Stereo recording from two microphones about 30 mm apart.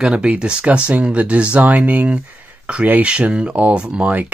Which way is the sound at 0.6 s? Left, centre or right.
Right.